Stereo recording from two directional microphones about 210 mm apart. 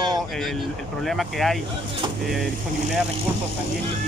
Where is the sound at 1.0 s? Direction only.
Centre (ahead or behind).